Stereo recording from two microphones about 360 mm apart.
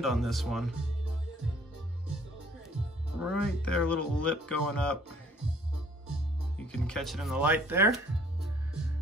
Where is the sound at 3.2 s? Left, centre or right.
Centre.